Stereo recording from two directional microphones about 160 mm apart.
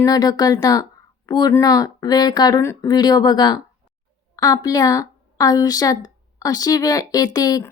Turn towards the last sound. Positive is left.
turn(degrees=25)  # may be behind; listen again after turning